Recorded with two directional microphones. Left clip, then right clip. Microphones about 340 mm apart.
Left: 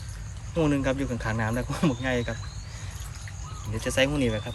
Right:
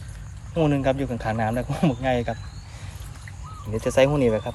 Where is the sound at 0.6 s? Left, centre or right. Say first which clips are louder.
Right 3 dB; centre.